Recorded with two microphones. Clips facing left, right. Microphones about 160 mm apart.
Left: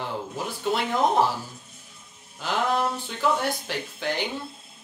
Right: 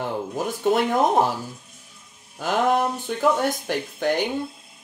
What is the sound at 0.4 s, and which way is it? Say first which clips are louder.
Speech: right 6 dB; 50° right (ahead or behind).